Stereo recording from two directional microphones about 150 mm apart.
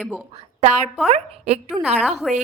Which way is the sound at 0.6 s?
50° right (ahead or behind).